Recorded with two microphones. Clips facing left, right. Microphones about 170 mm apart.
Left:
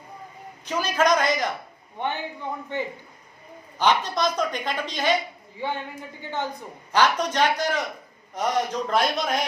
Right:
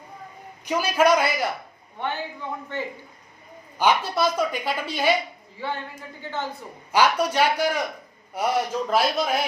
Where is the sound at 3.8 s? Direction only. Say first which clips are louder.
Right 1 dB; 10° right (ahead or behind).